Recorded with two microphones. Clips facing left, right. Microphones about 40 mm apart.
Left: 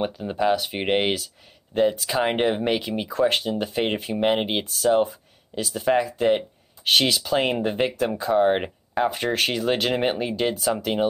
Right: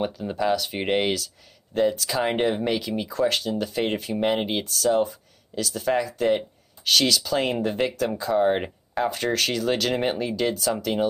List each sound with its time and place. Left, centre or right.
0.0 s speech: centre